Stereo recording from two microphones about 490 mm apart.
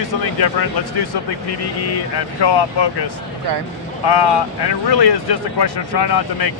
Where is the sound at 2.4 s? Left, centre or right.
Left.